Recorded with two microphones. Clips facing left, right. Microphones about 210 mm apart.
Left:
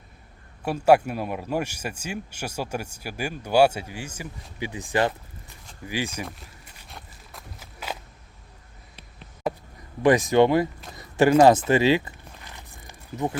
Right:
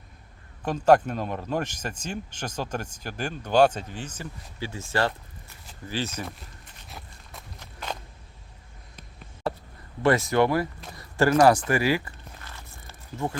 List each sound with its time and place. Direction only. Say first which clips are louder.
0.6 s speech: left 1 dB; 10° left (ahead or behind)
6.2 s walk: even; centre (ahead or behind)
10.0 s speech: left 4 dB; 15° left (ahead or behind)
10.9 s a sound: left 3 dB; 20° left (ahead or behind)